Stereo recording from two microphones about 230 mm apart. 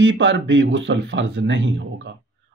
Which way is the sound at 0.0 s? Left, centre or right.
Right.